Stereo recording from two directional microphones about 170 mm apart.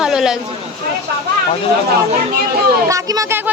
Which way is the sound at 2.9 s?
20° right (ahead or behind).